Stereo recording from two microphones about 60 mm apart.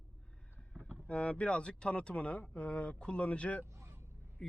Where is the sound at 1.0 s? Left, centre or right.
Left.